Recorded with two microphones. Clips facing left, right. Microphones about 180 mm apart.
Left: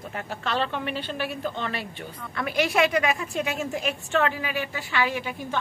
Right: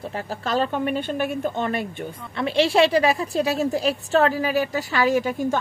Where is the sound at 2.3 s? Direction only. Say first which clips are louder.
Right 5 dB; 30° right (ahead or behind).